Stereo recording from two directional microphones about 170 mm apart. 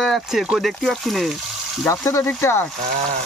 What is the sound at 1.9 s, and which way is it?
Speech, 20° left (ahead or behind).